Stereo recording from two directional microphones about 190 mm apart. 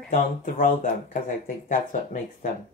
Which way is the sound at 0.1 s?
40° left (ahead or behind).